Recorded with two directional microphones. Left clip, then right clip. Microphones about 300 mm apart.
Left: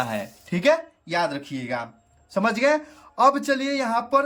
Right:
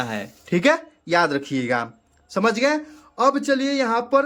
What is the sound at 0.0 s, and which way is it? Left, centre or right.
Speech, centre.